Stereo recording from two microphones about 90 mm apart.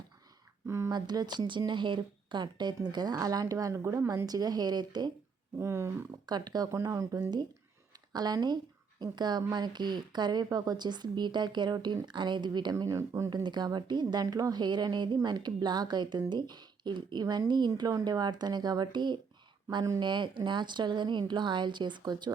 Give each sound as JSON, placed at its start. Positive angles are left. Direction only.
{"t": 0.9, "sound": "speech", "side_deg": -50}
{"t": 4.3, "sound": "speech", "side_deg": -45}
{"t": 5.5, "sound": "a sound", "side_deg": -30}
{"t": 6.2, "sound": "speech", "side_deg": -50}
{"t": 6.8, "sound": "speech", "side_deg": -40}
{"t": 13.0, "sound": "a sound", "side_deg": -30}
{"t": 13.3, "sound": "speech", "side_deg": -55}